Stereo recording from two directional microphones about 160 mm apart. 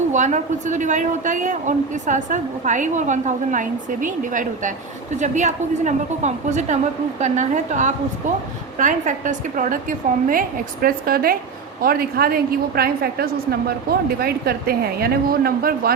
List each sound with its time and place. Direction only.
0.1 s a woman's voice: 50° right (ahead or behind); by 16.0 s 70° right (ahead or behind)